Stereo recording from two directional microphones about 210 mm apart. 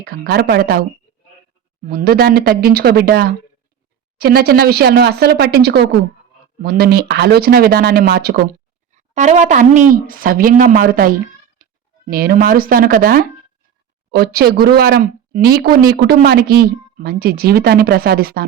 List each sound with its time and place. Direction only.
0.0 s speech: 45° right (ahead or behind)
1.9 s speech: 45° right (ahead or behind)
8.9 s speech: 35° right (ahead or behind)